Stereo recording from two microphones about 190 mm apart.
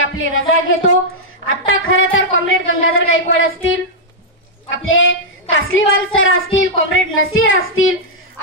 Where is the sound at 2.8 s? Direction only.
90° left.